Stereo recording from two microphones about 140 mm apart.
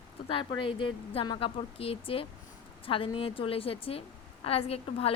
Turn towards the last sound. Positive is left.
turn(degrees=45)  # may be behind; listen again after turning